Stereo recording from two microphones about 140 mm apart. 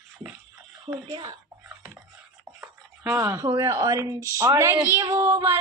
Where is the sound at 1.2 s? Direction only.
20° right (ahead or behind).